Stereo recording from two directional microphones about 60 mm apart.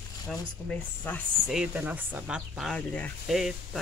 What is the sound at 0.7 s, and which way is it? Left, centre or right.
Speech, left.